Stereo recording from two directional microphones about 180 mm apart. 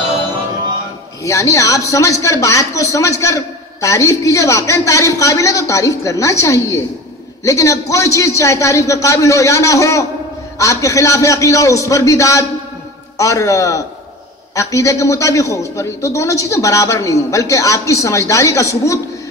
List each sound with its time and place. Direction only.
1.2 s a man's voice: 15° left (ahead or behind)